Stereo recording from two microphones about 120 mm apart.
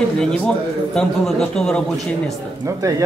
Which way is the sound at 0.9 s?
5° left (ahead or behind).